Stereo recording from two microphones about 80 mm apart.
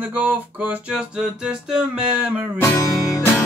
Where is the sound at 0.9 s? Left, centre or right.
Centre.